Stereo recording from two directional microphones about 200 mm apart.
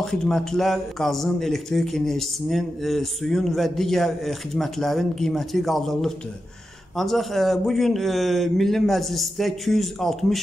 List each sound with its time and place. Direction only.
0.0 s speech: 5° left (ahead or behind)